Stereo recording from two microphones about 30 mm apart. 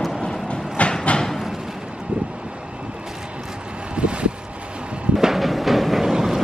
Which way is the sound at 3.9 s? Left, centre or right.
Right.